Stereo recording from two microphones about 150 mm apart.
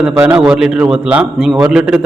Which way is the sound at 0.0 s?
10° right (ahead or behind).